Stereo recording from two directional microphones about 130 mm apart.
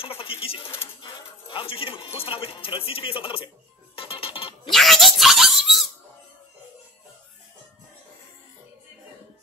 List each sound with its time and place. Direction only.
0.0 s speech: 45° left (ahead or behind)
3.9 s music: 45° left (ahead or behind)
4.6 s a sound: centre (ahead or behind)